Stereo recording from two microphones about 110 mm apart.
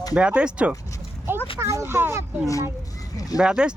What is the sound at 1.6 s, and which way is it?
Speech, 25° right (ahead or behind).